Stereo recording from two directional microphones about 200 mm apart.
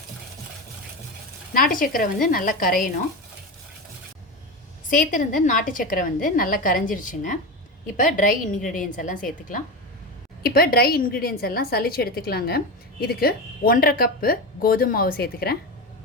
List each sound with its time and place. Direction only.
1.5 s a woman's voice: 45° left (ahead or behind)
4.9 s a woman's voice: 40° left (ahead or behind)